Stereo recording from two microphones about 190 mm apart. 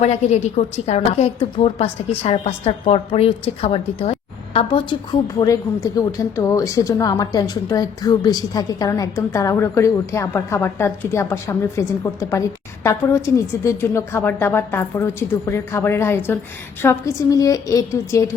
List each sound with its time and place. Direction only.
0.0 s a woman's voice: 35° left (ahead or behind); by 18.3 s 15° left (ahead or behind)